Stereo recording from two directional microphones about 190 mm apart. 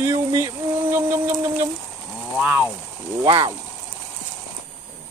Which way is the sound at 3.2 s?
30° right (ahead or behind).